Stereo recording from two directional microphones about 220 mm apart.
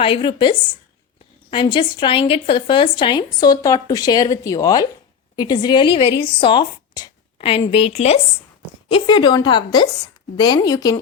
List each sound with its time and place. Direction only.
0.0 s a woman's voice: 20° left (ahead or behind)
6.3 s a sound: 25° left (ahead or behind)
7.6 s a woman's voice: 25° left (ahead or behind)